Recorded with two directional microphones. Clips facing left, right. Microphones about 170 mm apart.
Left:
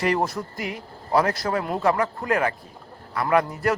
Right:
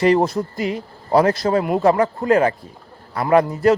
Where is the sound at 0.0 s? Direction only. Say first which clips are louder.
Right 7 dB; 25° right (ahead or behind).